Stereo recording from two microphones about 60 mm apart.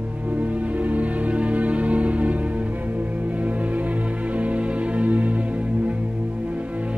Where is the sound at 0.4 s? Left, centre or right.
Right.